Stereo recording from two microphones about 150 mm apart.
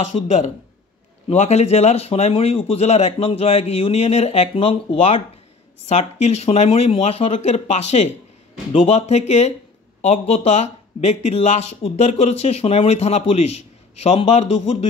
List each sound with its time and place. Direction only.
0.0 s speech: 50° left (ahead or behind)